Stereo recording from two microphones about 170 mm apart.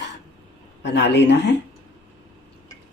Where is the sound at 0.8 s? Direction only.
90° left.